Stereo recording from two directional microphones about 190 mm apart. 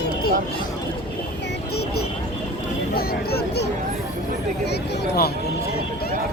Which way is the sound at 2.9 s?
55° left (ahead or behind).